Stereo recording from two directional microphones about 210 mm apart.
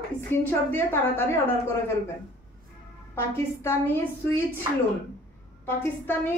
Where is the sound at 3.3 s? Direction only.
10° left (ahead or behind).